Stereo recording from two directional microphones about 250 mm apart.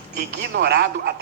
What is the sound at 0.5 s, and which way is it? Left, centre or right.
Speech, right.